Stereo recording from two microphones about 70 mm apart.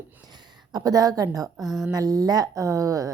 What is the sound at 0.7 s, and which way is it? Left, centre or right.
Speech, right.